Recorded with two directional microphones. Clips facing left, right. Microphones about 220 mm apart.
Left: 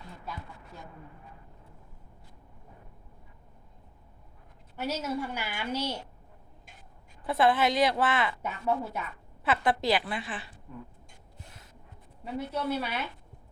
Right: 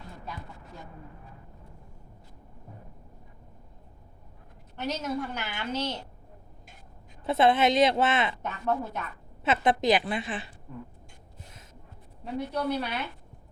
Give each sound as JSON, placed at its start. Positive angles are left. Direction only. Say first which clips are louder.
{"t": 4.8, "sound": "a woman's voice", "louder": "right 1 dB", "side_deg": 10}
{"t": 7.3, "sound": "a woman's voice", "louder": "right 3 dB", "side_deg": -20}
{"t": 8.4, "sound": "a woman's voice", "louder": "even", "side_deg": 10}
{"t": 9.4, "sound": "a woman's voice", "louder": "right 3 dB", "side_deg": -20}
{"t": 12.2, "sound": "a woman's voice", "louder": "right 2 dB", "side_deg": 5}